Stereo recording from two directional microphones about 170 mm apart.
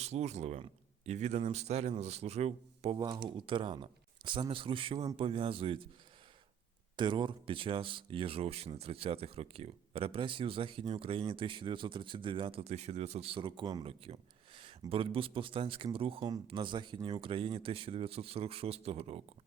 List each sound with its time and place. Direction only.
0.0 s speech: 40° right (ahead or behind)
6.9 s speech: 30° right (ahead or behind)